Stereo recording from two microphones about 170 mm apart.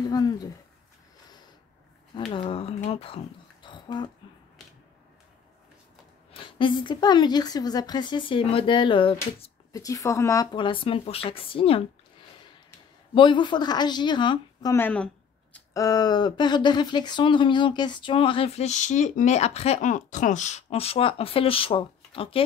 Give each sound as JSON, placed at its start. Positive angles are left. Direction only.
{"t": 0.1, "sound": "speech", "side_deg": 25}
{"t": 2.3, "sound": "speech", "side_deg": 30}
{"t": 3.6, "sound": "a sound", "side_deg": 25}
{"t": 6.3, "sound": "a woman's voice", "side_deg": 30}
{"t": 9.8, "sound": "a woman's voice", "side_deg": 20}
{"t": 13.1, "sound": "a woman's voice", "side_deg": 30}
{"t": 15.7, "sound": "speech", "side_deg": 20}